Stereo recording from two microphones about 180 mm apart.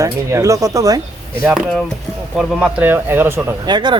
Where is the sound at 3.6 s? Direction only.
25° right (ahead or behind).